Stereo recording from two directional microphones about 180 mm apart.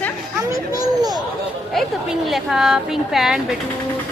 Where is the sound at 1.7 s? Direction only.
Centre (ahead or behind).